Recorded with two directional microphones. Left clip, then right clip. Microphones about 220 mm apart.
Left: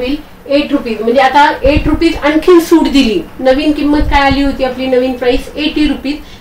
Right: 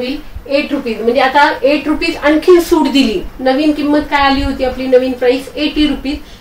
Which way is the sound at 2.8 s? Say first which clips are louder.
Left 2 dB; 15° left (ahead or behind).